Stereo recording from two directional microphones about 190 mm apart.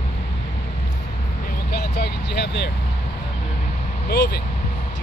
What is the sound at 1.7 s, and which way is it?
Vehicle, 55° left (ahead or behind).